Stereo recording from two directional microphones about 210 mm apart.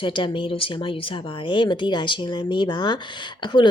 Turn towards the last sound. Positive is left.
turn(degrees=20)  # may be behind; listen again after turning